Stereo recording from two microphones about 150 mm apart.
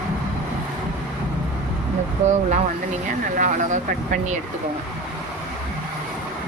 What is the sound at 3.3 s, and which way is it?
Speech, 60° right (ahead or behind).